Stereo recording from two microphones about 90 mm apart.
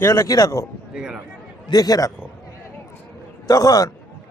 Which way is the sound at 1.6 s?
45° left (ahead or behind).